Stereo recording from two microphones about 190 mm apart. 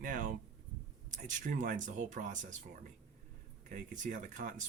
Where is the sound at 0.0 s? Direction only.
45° right (ahead or behind).